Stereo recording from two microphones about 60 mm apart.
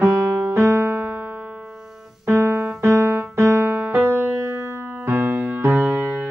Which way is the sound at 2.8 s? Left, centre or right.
Right.